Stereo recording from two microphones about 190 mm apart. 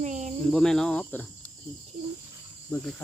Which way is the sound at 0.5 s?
5° left (ahead or behind).